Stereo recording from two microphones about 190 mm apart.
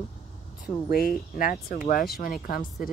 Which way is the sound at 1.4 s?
50° left (ahead or behind).